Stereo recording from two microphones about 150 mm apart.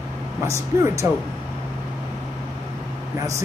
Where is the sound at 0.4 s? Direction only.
20° right (ahead or behind).